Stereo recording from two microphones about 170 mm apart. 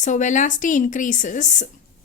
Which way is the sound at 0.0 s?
45° left (ahead or behind).